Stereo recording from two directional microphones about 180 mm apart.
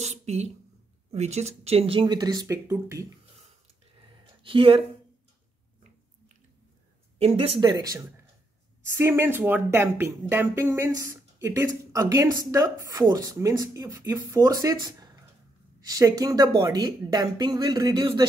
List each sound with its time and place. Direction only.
0.0 s a sound: 35° right (ahead or behind)
1.1 s speech: 40° right (ahead or behind); by 3.1 s 15° right (ahead or behind)
4.4 s speech: 30° right (ahead or behind)
7.2 s speech: 30° right (ahead or behind)
7.7 s speech: 20° right (ahead or behind)